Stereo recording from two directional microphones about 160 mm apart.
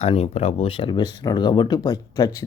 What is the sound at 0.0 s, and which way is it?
Speech, 40° left (ahead or behind).